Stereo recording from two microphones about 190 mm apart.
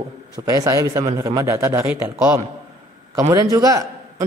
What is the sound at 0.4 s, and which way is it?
Speech, 15° right (ahead or behind).